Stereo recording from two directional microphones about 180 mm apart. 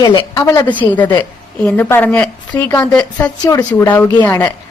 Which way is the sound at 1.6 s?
10° left (ahead or behind).